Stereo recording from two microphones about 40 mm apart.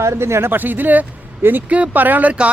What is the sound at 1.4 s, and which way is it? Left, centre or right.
Speech, right.